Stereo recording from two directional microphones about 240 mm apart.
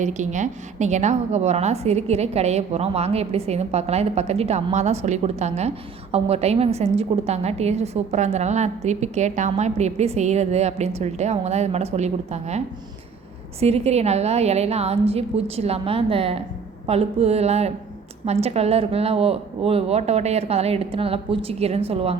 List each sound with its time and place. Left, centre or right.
0.0 s a woman's voice: right